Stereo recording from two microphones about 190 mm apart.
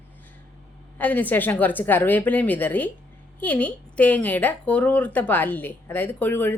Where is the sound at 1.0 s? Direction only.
10° left (ahead or behind).